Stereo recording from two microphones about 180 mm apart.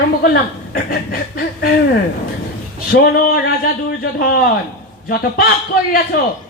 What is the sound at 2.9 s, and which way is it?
Speech, 55° left (ahead or behind).